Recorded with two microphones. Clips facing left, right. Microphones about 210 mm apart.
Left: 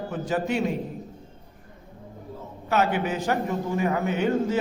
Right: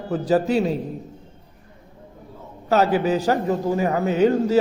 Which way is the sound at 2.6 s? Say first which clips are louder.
Right 6 dB; 35° right (ahead or behind).